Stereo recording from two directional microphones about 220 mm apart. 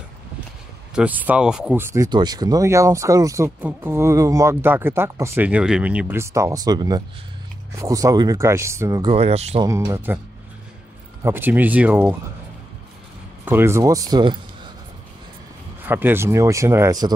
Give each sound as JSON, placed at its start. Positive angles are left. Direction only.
{"t": 0.9, "sound": "speech", "side_deg": -5}
{"t": 9.1, "sound": "speech", "side_deg": -30}
{"t": 9.7, "sound": "speech", "side_deg": -15}
{"t": 11.2, "sound": "speech", "side_deg": -10}
{"t": 13.5, "sound": "speech", "side_deg": -10}
{"t": 15.8, "sound": "speech", "side_deg": -10}